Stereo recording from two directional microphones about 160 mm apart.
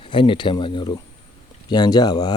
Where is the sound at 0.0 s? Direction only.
30° left (ahead or behind).